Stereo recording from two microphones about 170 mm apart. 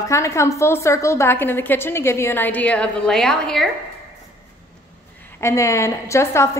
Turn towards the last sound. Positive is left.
turn(degrees=15)  # may be behind; listen again after turning